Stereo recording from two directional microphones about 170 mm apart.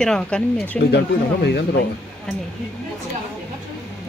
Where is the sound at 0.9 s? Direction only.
80° left.